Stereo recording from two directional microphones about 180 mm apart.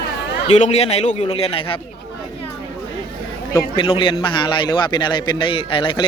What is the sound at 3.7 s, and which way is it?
A man's voice, 30° left (ahead or behind).